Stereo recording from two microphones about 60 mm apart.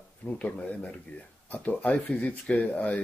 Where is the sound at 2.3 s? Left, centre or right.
Left.